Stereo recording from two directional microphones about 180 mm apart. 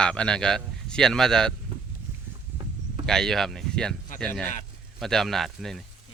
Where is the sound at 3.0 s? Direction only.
5° left (ahead or behind).